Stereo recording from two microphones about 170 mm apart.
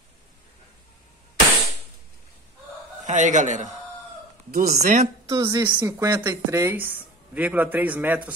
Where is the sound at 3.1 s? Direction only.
45° right (ahead or behind).